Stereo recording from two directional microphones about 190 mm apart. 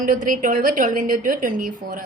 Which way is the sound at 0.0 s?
45° right (ahead or behind).